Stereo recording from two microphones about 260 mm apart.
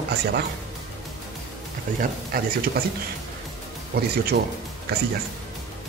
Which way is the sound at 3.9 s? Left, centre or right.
Right.